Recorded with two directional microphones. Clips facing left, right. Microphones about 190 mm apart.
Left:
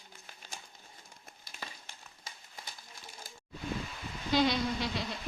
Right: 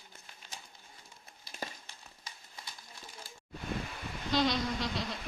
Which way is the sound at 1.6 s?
45° right (ahead or behind).